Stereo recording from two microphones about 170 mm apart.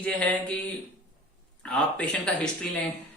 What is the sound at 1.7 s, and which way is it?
Speech, 5° left (ahead or behind).